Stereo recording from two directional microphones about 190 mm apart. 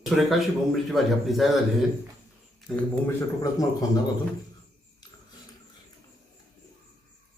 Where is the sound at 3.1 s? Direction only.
15° left (ahead or behind).